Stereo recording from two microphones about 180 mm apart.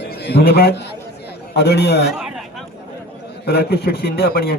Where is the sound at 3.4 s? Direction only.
65° left (ahead or behind).